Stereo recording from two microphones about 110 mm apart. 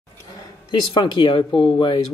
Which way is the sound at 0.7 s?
40° left (ahead or behind).